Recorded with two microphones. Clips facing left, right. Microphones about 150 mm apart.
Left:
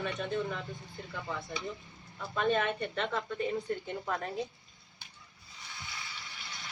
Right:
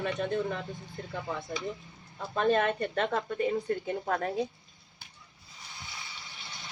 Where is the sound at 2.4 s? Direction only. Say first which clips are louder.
Right 4 dB; 45° right (ahead or behind).